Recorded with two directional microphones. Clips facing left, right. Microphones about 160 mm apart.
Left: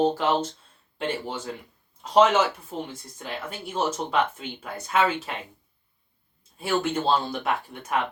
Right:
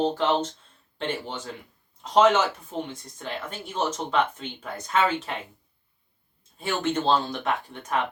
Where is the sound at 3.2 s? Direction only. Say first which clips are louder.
Even; 10° left (ahead or behind).